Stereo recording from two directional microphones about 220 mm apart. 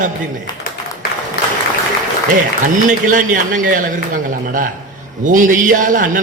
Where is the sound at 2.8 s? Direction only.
35° right (ahead or behind).